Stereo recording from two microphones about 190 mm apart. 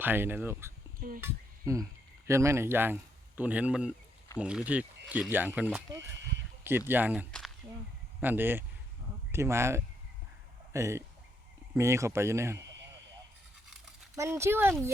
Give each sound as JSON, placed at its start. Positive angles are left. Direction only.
{"t": 0.0, "sound": "speech", "side_deg": -10}
{"t": 0.9, "sound": "speech", "side_deg": -45}
{"t": 1.2, "sound": "speech", "side_deg": -15}
{"t": 7.3, "sound": "a sound", "side_deg": 5}
{"t": 8.2, "sound": "speech", "side_deg": -10}
{"t": 14.2, "sound": "speech", "side_deg": -15}